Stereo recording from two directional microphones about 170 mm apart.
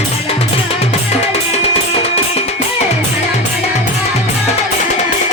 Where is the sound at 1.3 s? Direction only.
40° left (ahead or behind).